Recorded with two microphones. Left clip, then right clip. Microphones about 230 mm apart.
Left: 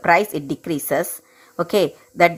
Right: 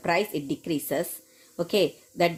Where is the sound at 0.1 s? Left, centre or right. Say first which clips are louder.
Left 9 dB; centre.